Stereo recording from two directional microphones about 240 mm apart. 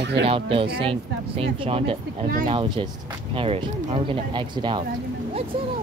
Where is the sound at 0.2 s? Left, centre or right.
Right.